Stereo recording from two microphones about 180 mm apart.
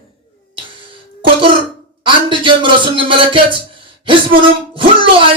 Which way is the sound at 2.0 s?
25° right (ahead or behind).